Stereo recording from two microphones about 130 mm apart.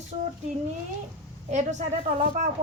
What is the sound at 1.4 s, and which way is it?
Speech, 70° right (ahead or behind).